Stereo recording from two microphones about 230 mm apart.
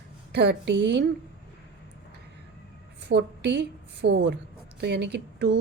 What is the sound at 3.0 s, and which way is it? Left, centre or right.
A woman's voice, right.